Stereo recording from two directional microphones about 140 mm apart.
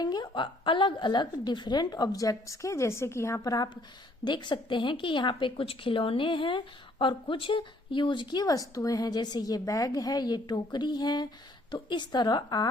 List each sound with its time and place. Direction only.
0.0 s a woman's voice: 30° left (ahead or behind)